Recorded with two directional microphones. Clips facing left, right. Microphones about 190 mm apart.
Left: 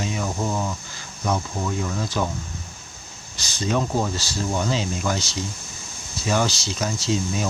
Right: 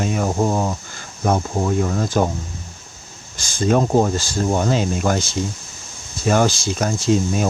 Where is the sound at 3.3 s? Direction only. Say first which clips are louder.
Right 6 dB; 50° right (ahead or behind).